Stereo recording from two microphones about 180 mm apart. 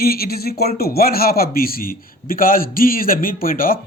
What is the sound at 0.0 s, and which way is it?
Speech, 55° left (ahead or behind).